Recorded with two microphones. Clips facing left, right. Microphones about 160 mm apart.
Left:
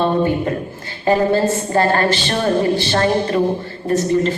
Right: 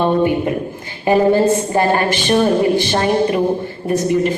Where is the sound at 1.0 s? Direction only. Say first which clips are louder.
Right 3 dB; 15° right (ahead or behind).